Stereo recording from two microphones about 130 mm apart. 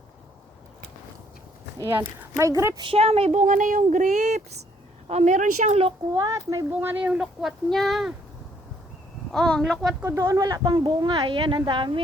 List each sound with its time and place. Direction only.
2.3 s speech: 25° right (ahead or behind)
2.8 s speech: 50° right (ahead or behind)
3.4 s a woman's voice: 85° right; by 5.9 s 55° right (ahead or behind)
6.1 s speech: 25° right (ahead or behind)
6.7 s speech: 10° right (ahead or behind)
9.3 s speech: 5° left (ahead or behind)
10.0 s speech: 20° right (ahead or behind); by 12.0 s 40° right (ahead or behind)